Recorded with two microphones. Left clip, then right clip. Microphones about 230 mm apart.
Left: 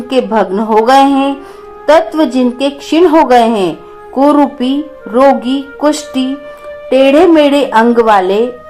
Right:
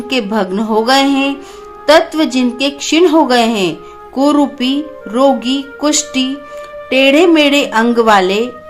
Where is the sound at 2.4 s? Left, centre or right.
Right.